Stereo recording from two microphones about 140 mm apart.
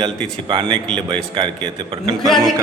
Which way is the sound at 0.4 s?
35° right (ahead or behind).